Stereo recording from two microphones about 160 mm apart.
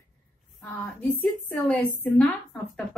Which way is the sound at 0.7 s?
10° left (ahead or behind).